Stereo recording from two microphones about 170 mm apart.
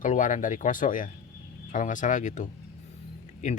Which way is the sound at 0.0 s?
50° left (ahead or behind).